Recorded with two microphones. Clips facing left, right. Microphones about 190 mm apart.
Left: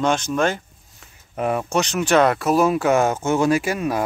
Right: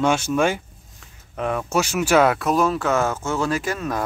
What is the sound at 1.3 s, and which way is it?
Speech, 10° left (ahead or behind).